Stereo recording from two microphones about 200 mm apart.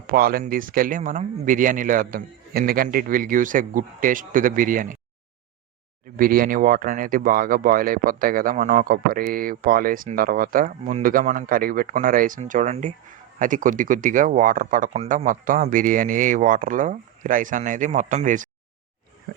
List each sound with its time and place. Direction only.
0.1 s speech: 45° right (ahead or behind)
6.1 s speech: 45° right (ahead or behind)